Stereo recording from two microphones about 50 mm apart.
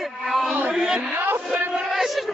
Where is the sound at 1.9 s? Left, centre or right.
Centre.